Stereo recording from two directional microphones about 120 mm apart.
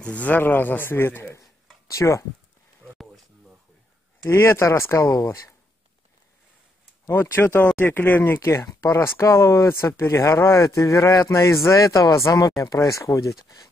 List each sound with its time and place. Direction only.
0.0 s a man's voice: 10° left (ahead or behind)
4.2 s speech: 20° left (ahead or behind)
7.1 s speech: 20° left (ahead or behind)